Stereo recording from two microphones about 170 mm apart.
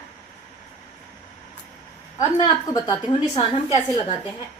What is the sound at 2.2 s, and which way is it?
A woman's voice, 25° left (ahead or behind).